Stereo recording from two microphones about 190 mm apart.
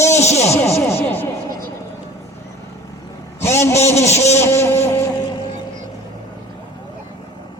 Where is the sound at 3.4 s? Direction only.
15° left (ahead or behind).